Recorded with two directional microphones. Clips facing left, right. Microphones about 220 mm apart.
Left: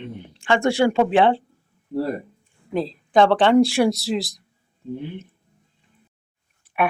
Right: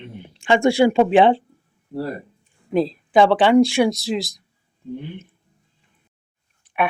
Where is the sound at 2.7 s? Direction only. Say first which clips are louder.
Right 3 dB; 10° right (ahead or behind).